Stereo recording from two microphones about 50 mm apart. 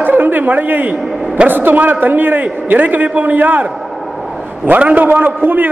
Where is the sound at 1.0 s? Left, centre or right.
Centre.